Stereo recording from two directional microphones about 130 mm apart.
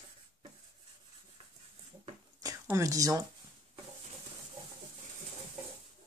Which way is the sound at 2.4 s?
25° right (ahead or behind).